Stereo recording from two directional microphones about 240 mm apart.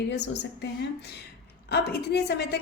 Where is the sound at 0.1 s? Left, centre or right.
Left.